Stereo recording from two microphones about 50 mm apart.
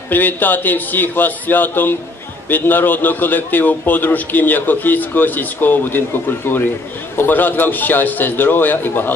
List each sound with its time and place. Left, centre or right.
0.1 s a man's voice: left